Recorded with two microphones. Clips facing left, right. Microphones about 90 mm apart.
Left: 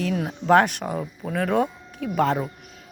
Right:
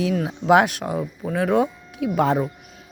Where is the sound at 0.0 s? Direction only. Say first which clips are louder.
Right 3 dB; 5° right (ahead or behind).